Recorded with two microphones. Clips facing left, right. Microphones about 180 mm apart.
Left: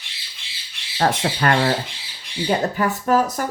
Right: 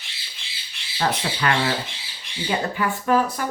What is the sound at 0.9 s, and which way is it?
Speech, 45° left (ahead or behind).